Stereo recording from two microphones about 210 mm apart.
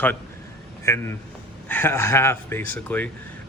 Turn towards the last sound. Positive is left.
turn(degrees=10)  # may be behind; listen again after turning